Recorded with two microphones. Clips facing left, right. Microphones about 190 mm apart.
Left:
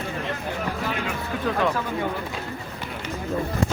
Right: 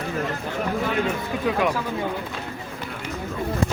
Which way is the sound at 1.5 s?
10° right (ahead or behind).